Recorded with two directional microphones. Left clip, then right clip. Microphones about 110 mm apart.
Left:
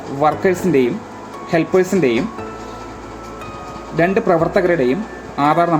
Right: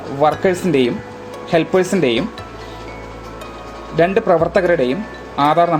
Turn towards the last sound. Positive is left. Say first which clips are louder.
# right 1 dB
turn(degrees=-15)  # may be behind; listen again after turning